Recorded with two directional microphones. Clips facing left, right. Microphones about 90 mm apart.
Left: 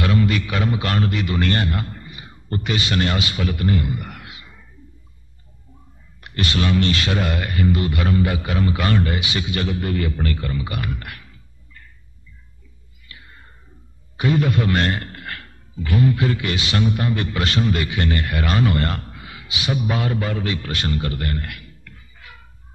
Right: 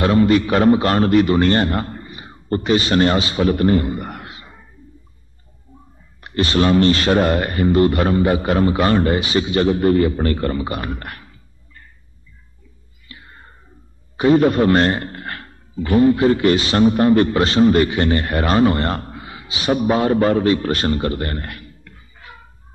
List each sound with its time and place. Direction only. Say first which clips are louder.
0.0 s a man's voice: right 6 dB; 35° right (ahead or behind)
6.2 s a man's voice: right 6 dB; 30° right (ahead or behind)
13.1 s a sound: right 3 dB; 30° right (ahead or behind)
14.1 s a man's voice: right 6 dB; 35° right (ahead or behind)